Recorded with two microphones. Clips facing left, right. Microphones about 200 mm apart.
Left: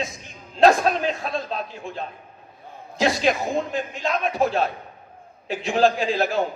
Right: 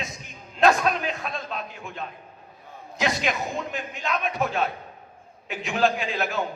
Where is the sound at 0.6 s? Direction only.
35° left (ahead or behind).